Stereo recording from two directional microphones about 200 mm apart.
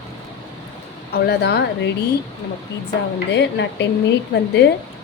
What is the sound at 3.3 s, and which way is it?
Speech, 60° left (ahead or behind).